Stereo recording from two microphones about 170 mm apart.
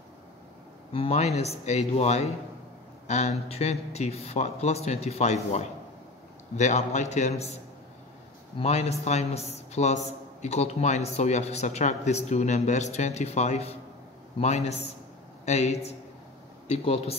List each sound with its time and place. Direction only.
0.9 s a man's voice: 35° left (ahead or behind)
8.5 s a man's voice: 40° left (ahead or behind)